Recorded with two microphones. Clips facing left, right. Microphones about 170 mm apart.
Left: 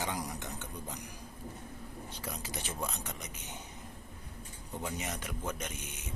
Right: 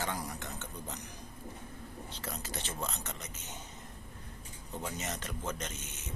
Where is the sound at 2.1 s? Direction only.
10° left (ahead or behind).